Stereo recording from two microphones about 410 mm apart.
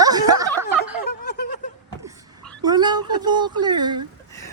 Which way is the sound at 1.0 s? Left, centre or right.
Left.